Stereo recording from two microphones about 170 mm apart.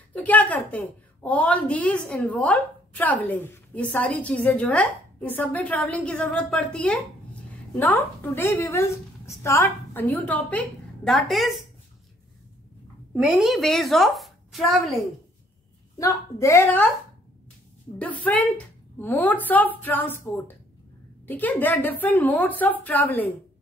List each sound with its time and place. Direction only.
0.1 s a woman's voice: 10° left (ahead or behind)
13.1 s a woman's voice: 5° right (ahead or behind)
16.0 s a woman's voice: 20° left (ahead or behind)
17.9 s a woman's voice: 10° left (ahead or behind)